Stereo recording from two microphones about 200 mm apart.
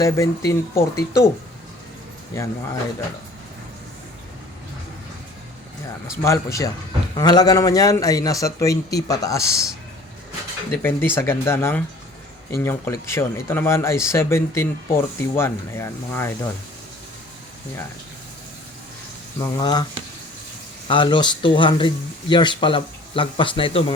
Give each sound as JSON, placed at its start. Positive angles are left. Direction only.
{"t": 0.0, "sound": "speech", "side_deg": 15}
{"t": 6.1, "sound": "speech", "side_deg": 15}
{"t": 10.7, "sound": "speech", "side_deg": 10}
{"t": 19.4, "sound": "speech", "side_deg": 20}